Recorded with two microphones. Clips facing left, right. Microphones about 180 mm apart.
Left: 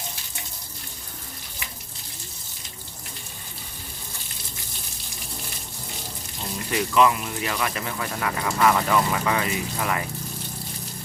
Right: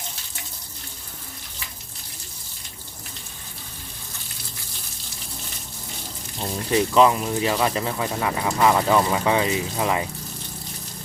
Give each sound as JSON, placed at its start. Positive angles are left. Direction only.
{"t": 6.7, "sound": "speech", "side_deg": -30}